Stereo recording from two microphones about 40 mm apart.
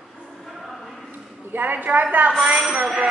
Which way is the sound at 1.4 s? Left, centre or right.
Right.